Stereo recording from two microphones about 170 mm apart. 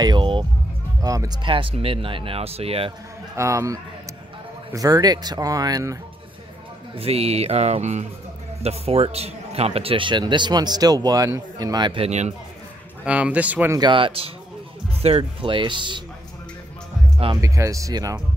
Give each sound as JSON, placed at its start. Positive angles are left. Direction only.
{"t": 0.0, "sound": "speech", "side_deg": -25}
{"t": 3.3, "sound": "a man's voice", "side_deg": -20}
{"t": 7.0, "sound": "a man's voice", "side_deg": -35}
{"t": 12.1, "sound": "speech", "side_deg": -40}
{"t": 13.0, "sound": "speech", "side_deg": -5}
{"t": 13.7, "sound": "a man's voice", "side_deg": -30}
{"t": 17.4, "sound": "a man's voice", "side_deg": -20}